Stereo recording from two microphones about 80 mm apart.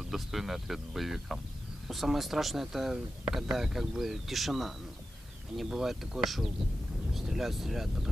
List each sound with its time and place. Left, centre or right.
0.1 s speech: centre